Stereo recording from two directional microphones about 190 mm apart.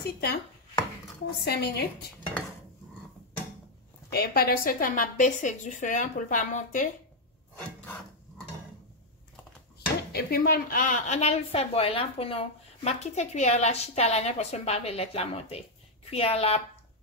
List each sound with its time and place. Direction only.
0.0 s a woman's voice: 55° left (ahead or behind)
1.4 s a woman's voice: 55° left (ahead or behind)
4.1 s a woman's voice: 55° left (ahead or behind)
10.1 s a woman's voice: 55° left (ahead or behind); by 16.6 s 30° left (ahead or behind)